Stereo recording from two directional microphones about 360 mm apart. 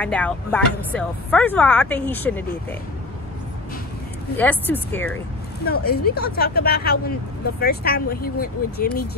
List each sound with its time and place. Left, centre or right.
0.0 s speech: centre
4.4 s speech: centre
5.7 s speech: left